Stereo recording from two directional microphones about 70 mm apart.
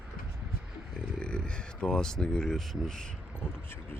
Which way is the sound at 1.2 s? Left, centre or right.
Centre.